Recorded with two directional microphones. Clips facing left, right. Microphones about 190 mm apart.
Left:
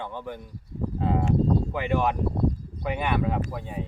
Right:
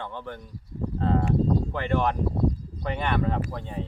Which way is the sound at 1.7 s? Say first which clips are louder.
Even; 10° left (ahead or behind).